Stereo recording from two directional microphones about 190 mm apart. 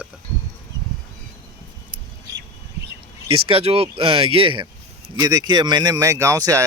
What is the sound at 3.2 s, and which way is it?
Speech, 30° right (ahead or behind).